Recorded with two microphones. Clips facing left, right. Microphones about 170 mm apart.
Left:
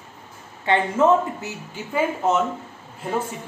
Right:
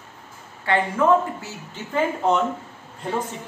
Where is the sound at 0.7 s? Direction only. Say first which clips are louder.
Left 1 dB; 20° left (ahead or behind).